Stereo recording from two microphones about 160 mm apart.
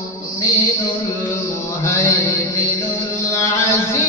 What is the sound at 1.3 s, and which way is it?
Music, 20° left (ahead or behind).